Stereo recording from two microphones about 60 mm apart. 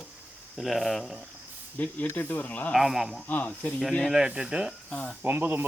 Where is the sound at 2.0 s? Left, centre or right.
Left.